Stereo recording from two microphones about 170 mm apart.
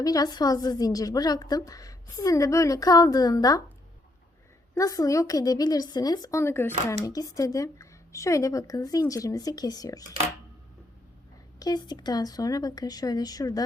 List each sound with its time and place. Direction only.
0.0 s a woman's voice: 20° left (ahead or behind)
4.7 s a woman's voice: 20° left (ahead or behind)
11.6 s a woman's voice: 25° left (ahead or behind)